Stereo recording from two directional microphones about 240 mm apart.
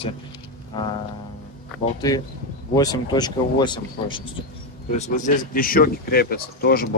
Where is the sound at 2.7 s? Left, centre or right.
Centre.